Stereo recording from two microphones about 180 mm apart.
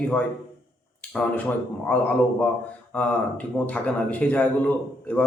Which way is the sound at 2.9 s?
5° left (ahead or behind).